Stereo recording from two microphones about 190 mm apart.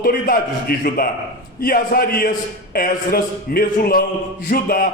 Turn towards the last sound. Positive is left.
turn(degrees=50)  # may be behind; listen again after turning